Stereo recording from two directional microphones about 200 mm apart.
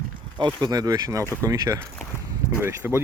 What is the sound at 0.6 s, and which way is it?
Speech, 20° right (ahead or behind).